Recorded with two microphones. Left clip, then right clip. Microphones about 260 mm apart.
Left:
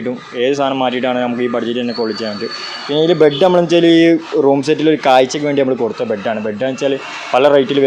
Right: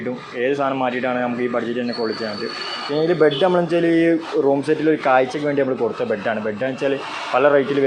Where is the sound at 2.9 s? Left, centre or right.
Left.